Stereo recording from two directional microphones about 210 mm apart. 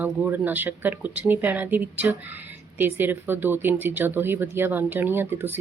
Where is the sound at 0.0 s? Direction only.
10° right (ahead or behind).